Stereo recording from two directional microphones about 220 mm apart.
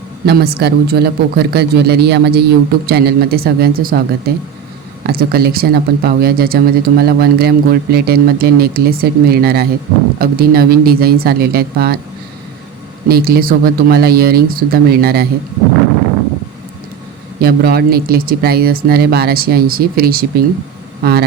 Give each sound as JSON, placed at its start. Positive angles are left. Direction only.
{"t": 0.3, "sound": "speech", "side_deg": -45}
{"t": 5.0, "sound": "speech", "side_deg": -45}
{"t": 13.1, "sound": "speech", "side_deg": -45}
{"t": 17.4, "sound": "speech", "side_deg": -45}